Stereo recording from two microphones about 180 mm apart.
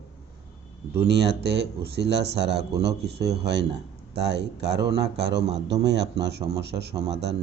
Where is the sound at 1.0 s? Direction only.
70° right (ahead or behind).